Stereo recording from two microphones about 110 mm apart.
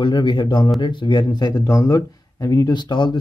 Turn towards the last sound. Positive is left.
turn(degrees=45)  # may be behind; listen again after turning